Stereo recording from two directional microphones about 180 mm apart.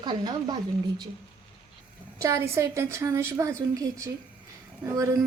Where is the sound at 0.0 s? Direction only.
25° right (ahead or behind).